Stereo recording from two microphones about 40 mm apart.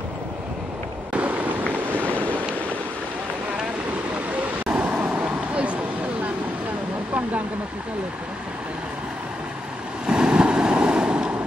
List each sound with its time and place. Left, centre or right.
1.1 s fireworks: right
1.9 s a sound: right
4.6 s vehicle: right
10.0 s vehicle: centre